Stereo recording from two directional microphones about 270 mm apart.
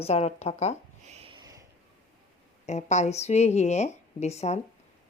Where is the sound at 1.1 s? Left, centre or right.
Right.